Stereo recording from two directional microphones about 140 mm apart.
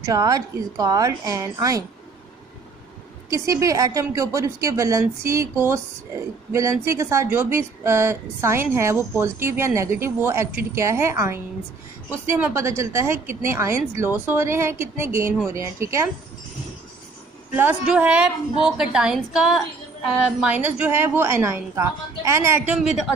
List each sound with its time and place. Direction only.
0.0 s speech: 25° right (ahead or behind)
3.3 s a woman's voice: 25° right (ahead or behind)
17.6 s a woman's voice: 10° right (ahead or behind)
22.8 s a woman's voice: 5° right (ahead or behind)